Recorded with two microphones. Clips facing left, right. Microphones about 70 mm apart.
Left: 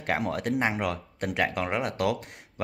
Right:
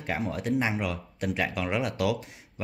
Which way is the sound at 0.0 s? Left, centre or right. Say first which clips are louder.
Left 3 dB; left.